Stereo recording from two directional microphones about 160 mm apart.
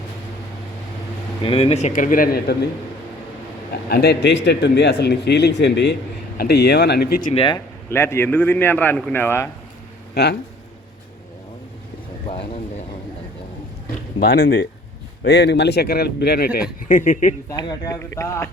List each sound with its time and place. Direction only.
1.4 s speech: 35° left (ahead or behind); by 2.6 s 80° left
3.8 s a man's voice: 85° left
7.3 s speech: 30° left (ahead or behind)
7.9 s a man's voice: 15° left (ahead or behind)
10.2 s a man's voice: 90° left
12.3 s a sound: 40° left (ahead or behind)
14.3 s speech: 70° left (ahead or behind)
15.2 s a man's voice: 90° left
16.9 s speech: 55° left (ahead or behind)
17.5 s a man's voice: 25° left (ahead or behind)